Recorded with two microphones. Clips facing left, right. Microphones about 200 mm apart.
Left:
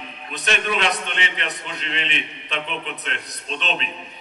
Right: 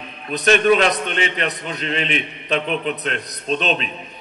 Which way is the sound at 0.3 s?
40° right (ahead or behind).